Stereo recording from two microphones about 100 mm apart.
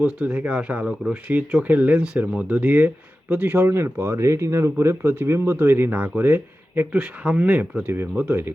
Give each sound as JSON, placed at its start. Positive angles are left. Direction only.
{"t": 0.0, "sound": "speech", "side_deg": -10}